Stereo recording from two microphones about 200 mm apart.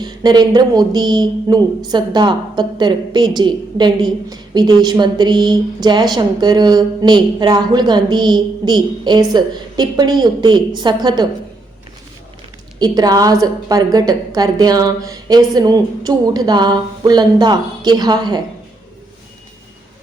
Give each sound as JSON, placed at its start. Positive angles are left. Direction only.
{"t": 0.0, "sound": "speech", "side_deg": -20}
{"t": 12.8, "sound": "speech", "side_deg": -20}